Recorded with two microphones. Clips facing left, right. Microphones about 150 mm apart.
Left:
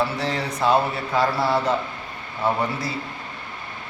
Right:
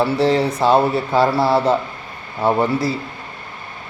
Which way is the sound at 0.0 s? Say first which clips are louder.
Right 9 dB; 30° right (ahead or behind).